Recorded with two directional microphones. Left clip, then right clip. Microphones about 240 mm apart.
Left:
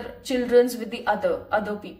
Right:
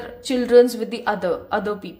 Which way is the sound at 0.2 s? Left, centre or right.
Right.